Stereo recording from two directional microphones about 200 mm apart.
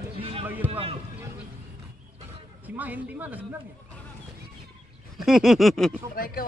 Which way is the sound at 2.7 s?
10° right (ahead or behind).